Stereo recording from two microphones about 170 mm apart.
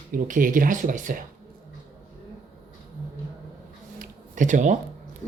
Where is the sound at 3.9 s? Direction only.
50° right (ahead or behind).